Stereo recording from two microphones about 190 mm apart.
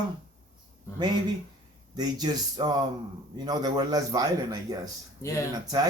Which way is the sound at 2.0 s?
20° right (ahead or behind).